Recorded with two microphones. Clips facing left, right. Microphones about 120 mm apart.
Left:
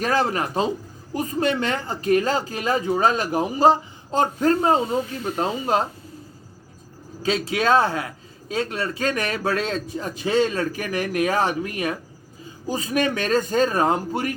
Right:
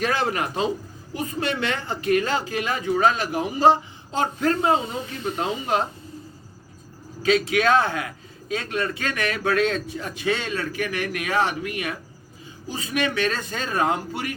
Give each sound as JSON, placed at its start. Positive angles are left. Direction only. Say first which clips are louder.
{"t": 0.0, "sound": "speech", "louder": "left 2 dB", "side_deg": 40}
{"t": 7.2, "sound": "speech", "louder": "right 3 dB", "side_deg": 30}